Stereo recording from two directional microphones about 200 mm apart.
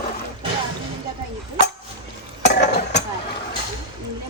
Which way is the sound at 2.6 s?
60° left (ahead or behind).